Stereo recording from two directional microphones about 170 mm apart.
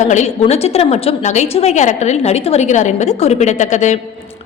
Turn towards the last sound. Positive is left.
turn(degrees=45)  # may be behind; listen again after turning